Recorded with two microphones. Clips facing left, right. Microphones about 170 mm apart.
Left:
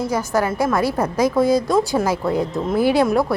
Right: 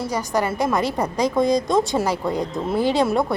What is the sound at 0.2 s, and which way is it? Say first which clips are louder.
A woman's voice: right 1 dB; 15° right (ahead or behind).